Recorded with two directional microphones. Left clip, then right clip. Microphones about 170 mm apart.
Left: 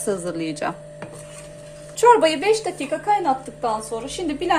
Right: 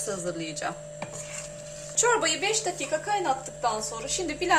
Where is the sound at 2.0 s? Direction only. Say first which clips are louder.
Left 10 dB; 50° left (ahead or behind).